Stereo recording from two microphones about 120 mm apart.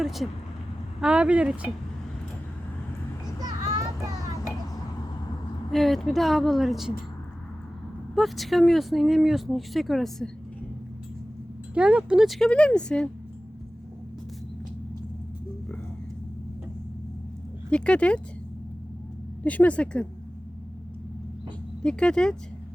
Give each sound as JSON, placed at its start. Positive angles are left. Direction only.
{"t": 0.0, "sound": "speech", "side_deg": 0}
{"t": 3.3, "sound": "children playing", "side_deg": -35}
{"t": 5.7, "sound": "speech", "side_deg": 0}
{"t": 8.1, "sound": "speech", "side_deg": 0}
{"t": 11.7, "sound": "speech", "side_deg": -10}
{"t": 12.5, "sound": "speech", "side_deg": 10}
{"t": 17.7, "sound": "speech", "side_deg": 10}
{"t": 19.5, "sound": "speech", "side_deg": 10}
{"t": 21.8, "sound": "speech", "side_deg": 5}